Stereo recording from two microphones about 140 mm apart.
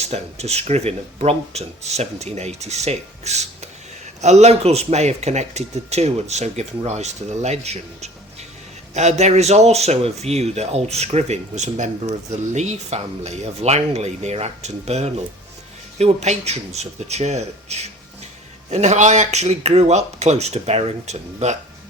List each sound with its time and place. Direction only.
0.1 s speech: 50° right (ahead or behind)